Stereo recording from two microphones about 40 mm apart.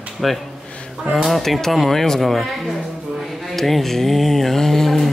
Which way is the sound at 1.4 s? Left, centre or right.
Centre.